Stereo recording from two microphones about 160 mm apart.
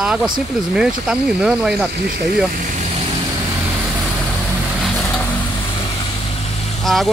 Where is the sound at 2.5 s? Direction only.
55° right (ahead or behind).